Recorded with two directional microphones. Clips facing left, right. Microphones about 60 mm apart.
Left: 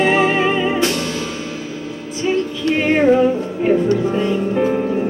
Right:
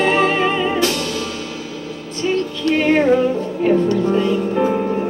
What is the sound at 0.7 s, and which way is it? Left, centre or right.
Music, left.